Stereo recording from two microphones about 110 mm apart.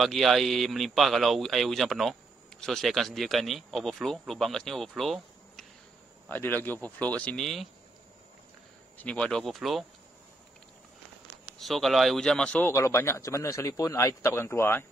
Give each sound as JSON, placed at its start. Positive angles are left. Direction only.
{"t": 0.0, "sound": "speech", "side_deg": 0}
{"t": 6.2, "sound": "speech", "side_deg": 15}
{"t": 8.9, "sound": "speech", "side_deg": 10}
{"t": 11.5, "sound": "speech", "side_deg": 0}
{"t": 12.6, "sound": "a man's voice", "side_deg": 25}